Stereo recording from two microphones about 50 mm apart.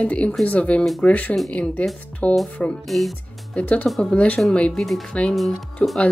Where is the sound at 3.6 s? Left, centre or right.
Left.